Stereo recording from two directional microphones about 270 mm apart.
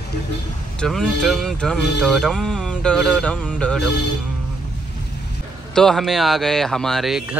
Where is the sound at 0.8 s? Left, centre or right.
Centre.